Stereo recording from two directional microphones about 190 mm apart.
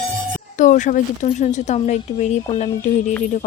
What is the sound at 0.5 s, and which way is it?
Speech, 40° left (ahead or behind).